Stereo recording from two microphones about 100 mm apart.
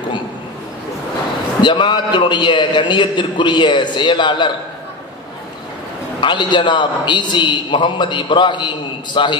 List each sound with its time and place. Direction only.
1.6 s a man's voice: 50° left (ahead or behind)
6.2 s a man's voice: 50° left (ahead or behind)